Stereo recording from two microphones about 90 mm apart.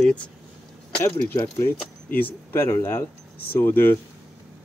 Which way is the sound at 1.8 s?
20° left (ahead or behind).